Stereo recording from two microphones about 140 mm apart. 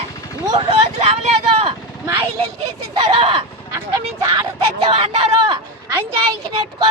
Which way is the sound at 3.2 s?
45° right (ahead or behind).